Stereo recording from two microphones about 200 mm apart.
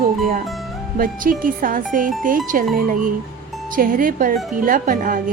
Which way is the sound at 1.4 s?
45° right (ahead or behind).